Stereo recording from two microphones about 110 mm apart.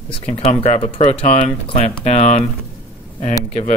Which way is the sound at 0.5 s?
90° left.